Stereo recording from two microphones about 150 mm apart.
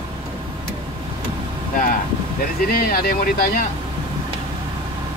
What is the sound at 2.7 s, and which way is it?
Speech, 75° left (ahead or behind).